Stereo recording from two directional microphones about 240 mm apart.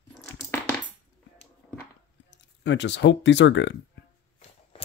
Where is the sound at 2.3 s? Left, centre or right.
Left.